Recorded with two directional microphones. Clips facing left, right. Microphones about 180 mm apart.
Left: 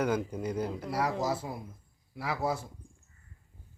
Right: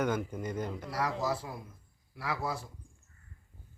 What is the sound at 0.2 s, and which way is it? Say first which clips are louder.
A man's voice: left 3 dB; 15° left (ahead or behind).